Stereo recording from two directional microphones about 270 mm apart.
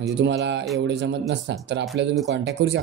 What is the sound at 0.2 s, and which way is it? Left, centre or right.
Speech, right.